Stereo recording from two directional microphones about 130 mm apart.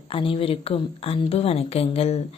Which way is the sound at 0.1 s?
45° left (ahead or behind).